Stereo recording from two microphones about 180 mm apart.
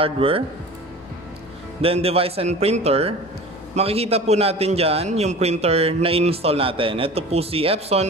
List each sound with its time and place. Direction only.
0.0 s a man's voice: 30° right (ahead or behind)
1.8 s a man's voice: 35° right (ahead or behind)